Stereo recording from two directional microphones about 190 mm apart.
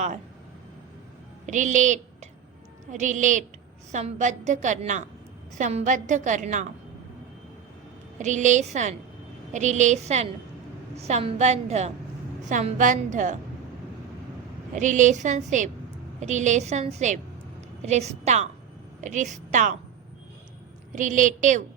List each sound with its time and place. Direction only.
1.5 s a woman's voice: 40° right (ahead or behind)
8.2 s a woman's voice: 40° right (ahead or behind)
14.8 s a woman's voice: 40° right (ahead or behind)
20.9 s a woman's voice: 40° right (ahead or behind)